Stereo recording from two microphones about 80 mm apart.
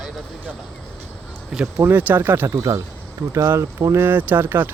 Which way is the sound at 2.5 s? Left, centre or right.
Right.